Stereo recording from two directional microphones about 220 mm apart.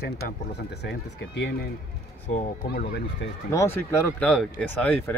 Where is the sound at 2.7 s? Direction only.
45° left (ahead or behind).